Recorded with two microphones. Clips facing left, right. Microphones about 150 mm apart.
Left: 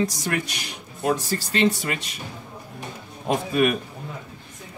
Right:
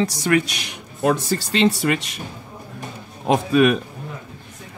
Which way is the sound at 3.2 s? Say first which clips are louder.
Right 5 dB; 80° right.